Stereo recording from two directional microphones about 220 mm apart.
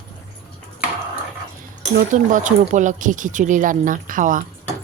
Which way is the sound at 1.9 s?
35° right (ahead or behind).